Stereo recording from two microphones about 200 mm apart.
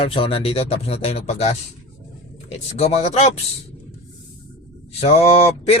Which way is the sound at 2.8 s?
30° left (ahead or behind).